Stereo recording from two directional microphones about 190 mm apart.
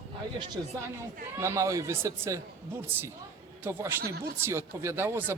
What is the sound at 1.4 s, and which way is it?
Speech, 15° right (ahead or behind).